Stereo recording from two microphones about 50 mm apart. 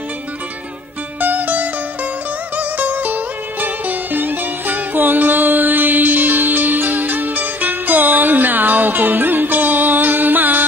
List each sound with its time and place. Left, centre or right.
1.2 s music: right